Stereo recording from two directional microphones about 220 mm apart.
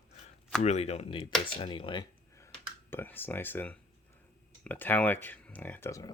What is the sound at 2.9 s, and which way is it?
Speech, 10° left (ahead or behind).